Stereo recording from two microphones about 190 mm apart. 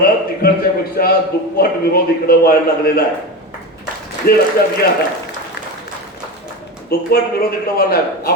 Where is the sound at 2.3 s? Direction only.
50° left (ahead or behind).